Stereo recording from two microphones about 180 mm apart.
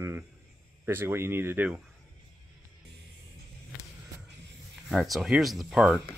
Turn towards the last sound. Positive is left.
turn(degrees=-5)  # may be behind; listen again after turning